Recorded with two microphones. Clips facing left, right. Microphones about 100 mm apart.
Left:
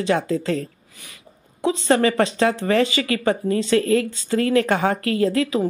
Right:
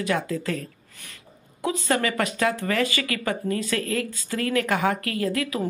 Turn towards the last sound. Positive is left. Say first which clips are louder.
# left 6 dB
turn(degrees=30)  # may be behind; listen again after turning